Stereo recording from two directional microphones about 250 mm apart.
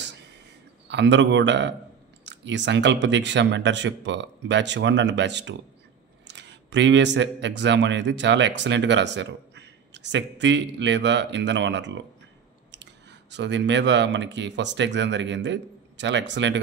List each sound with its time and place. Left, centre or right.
0.8 s speech: right